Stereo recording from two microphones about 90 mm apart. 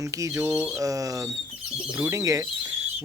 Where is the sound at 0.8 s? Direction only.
40° right (ahead or behind).